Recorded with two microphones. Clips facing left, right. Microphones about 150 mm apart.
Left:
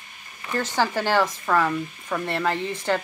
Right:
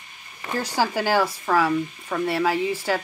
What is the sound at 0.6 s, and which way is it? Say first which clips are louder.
Speech: even; 10° right (ahead or behind).